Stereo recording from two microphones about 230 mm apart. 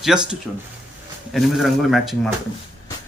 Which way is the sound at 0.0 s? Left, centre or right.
Centre.